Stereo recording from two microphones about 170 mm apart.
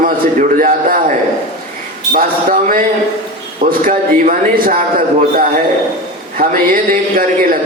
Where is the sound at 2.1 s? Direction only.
55° right (ahead or behind).